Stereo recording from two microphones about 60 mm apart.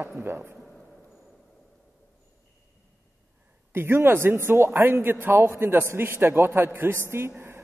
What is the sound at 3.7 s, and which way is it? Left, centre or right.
A man's voice, right.